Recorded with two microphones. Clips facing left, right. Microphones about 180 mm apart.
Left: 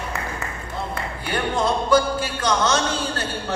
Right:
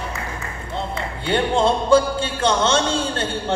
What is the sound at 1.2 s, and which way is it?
Music, 25° right (ahead or behind).